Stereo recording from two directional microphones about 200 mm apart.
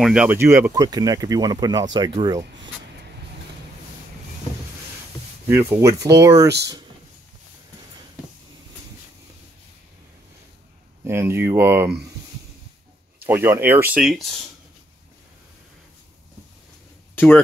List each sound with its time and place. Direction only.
0.0 s speech: 5° right (ahead or behind); by 2.7 s 20° right (ahead or behind)
5.5 s speech: 10° right (ahead or behind)
11.1 s speech: 10° right (ahead or behind)
13.2 s speech: 10° right (ahead or behind)
17.1 s a sound: 10° left (ahead or behind)